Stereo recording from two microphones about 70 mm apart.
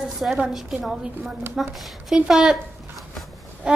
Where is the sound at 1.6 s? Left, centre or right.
Centre.